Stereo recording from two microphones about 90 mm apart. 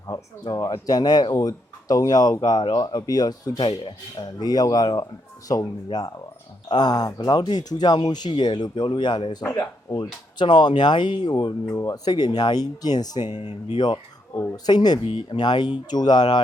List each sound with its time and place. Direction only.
0.1 s speech: 45° left (ahead or behind)
10.4 s speech: 60° left (ahead or behind)
11.7 s speech: 40° left (ahead or behind)
13.7 s speech: 60° left (ahead or behind)
15.0 s speech: 70° left (ahead or behind); by 16.4 s 50° left (ahead or behind)